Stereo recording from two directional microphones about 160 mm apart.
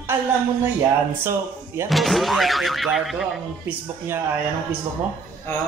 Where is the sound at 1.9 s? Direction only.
Centre (ahead or behind).